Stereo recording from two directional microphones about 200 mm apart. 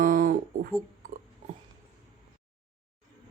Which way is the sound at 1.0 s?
40° right (ahead or behind).